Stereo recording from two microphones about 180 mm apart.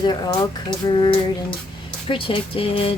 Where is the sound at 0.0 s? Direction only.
20° left (ahead or behind).